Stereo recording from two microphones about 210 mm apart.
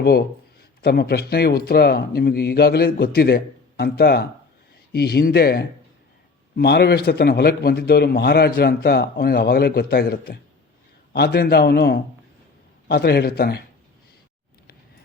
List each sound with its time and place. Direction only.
0.0 s a man's voice: 50° left (ahead or behind)